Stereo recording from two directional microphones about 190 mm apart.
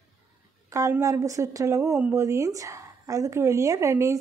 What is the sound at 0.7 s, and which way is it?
Speech, 15° right (ahead or behind).